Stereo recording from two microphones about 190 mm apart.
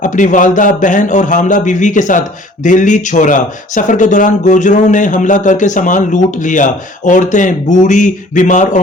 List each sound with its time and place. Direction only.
0.0 s speech: 40° left (ahead or behind)